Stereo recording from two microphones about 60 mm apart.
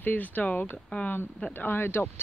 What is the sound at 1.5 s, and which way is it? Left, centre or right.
Speech, left.